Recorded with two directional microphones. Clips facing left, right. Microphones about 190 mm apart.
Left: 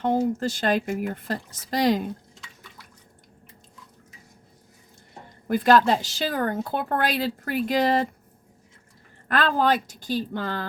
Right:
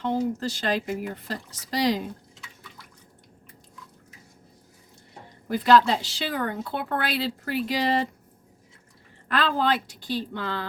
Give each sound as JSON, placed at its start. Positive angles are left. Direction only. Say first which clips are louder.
{"t": 0.0, "sound": "a woman's voice", "louder": "left 3 dB", "side_deg": 50}
{"t": 5.5, "sound": "a woman's voice", "louder": "left 1 dB", "side_deg": 50}
{"t": 9.3, "sound": "a woman's voice", "louder": "left 2 dB", "side_deg": 45}